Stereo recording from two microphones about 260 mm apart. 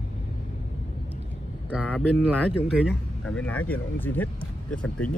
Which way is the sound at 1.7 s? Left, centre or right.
Centre.